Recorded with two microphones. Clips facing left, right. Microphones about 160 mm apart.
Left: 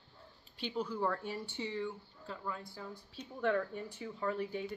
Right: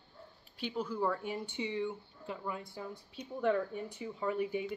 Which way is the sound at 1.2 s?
15° right (ahead or behind).